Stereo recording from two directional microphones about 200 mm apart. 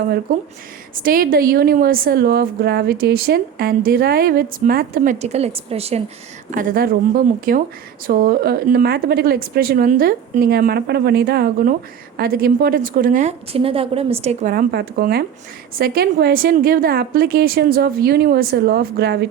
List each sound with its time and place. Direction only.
0.3 s a woman's voice: 45° right (ahead or behind)
5.2 s a woman's voice: 30° right (ahead or behind)
6.5 s a woman's voice: 45° right (ahead or behind)
14.5 s a woman's voice: 50° right (ahead or behind)